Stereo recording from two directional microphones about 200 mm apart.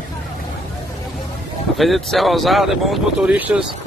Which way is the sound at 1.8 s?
Centre (ahead or behind).